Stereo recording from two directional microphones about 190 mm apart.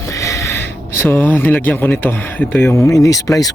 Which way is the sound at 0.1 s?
15° left (ahead or behind).